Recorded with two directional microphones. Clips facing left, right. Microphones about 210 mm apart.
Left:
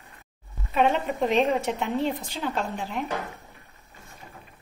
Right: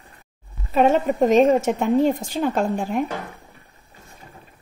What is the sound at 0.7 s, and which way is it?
A woman's voice, 40° right (ahead or behind).